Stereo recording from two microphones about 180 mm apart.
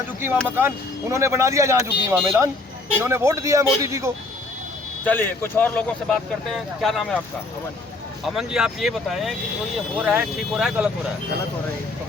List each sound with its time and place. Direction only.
0.4 s speech: 10° right (ahead or behind)
5.0 s speech: 10° left (ahead or behind)
8.4 s speech: 5° right (ahead or behind)